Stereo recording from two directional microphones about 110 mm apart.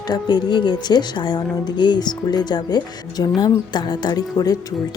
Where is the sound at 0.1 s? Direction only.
45° left (ahead or behind).